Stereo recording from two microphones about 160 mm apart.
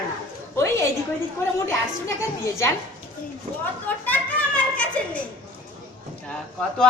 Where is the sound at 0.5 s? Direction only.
15° left (ahead or behind).